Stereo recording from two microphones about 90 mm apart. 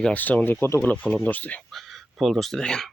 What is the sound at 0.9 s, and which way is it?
Speech, 15° left (ahead or behind).